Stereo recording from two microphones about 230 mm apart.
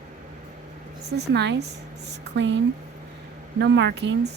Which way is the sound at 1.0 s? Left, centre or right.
Right.